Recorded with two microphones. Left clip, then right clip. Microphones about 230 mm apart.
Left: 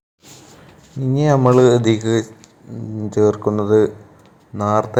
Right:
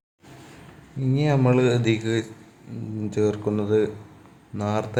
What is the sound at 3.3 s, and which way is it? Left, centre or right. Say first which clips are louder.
Speech: left 7 dB; centre.